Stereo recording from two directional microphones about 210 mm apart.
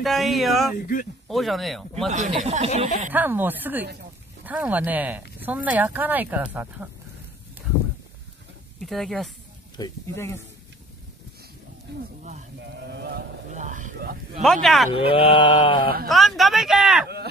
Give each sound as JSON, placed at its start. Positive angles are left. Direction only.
{"t": 0.0, "sound": "speech", "side_deg": 0}
{"t": 0.7, "sound": "speech", "side_deg": 40}
{"t": 1.3, "sound": "speech", "side_deg": 0}
{"t": 2.0, "sound": "speech", "side_deg": -35}
{"t": 3.1, "sound": "speech", "side_deg": -10}
{"t": 8.7, "sound": "speech", "side_deg": 0}
{"t": 9.8, "sound": "speech", "side_deg": 15}
{"t": 12.2, "sound": "speech", "side_deg": -35}
{"t": 12.5, "sound": "a sound", "side_deg": -55}
{"t": 13.5, "sound": "a sound", "side_deg": -35}
{"t": 14.4, "sound": "speech", "side_deg": 0}
{"t": 15.0, "sound": "mantra", "side_deg": 25}
{"t": 16.1, "sound": "speech", "side_deg": 0}